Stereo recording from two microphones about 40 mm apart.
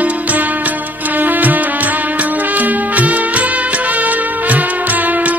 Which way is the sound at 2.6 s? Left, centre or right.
Right.